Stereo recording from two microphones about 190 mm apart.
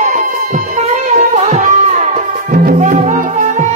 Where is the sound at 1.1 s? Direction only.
40° right (ahead or behind).